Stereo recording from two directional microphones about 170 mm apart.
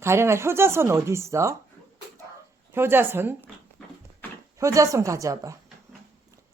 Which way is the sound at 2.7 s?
15° right (ahead or behind).